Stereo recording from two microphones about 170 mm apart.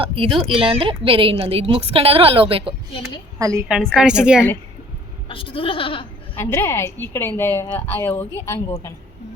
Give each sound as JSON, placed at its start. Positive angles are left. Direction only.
{"t": 0.0, "sound": "a woman's voice", "side_deg": -30}
{"t": 3.3, "sound": "a woman's voice", "side_deg": -20}
{"t": 3.7, "sound": "a woman's voice", "side_deg": 0}
{"t": 5.3, "sound": "goat", "side_deg": 30}
{"t": 6.3, "sound": "a woman's voice", "side_deg": 15}